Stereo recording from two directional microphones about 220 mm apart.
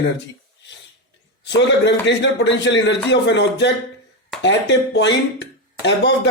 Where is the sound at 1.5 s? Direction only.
55° left (ahead or behind).